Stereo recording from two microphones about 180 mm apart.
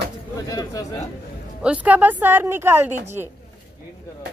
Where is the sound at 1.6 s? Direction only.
5° right (ahead or behind).